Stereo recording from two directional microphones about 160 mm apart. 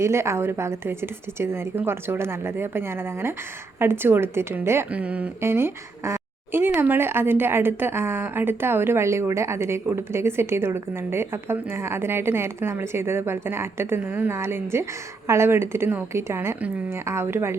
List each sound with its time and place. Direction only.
0.0 s a woman's voice: 15° right (ahead or behind)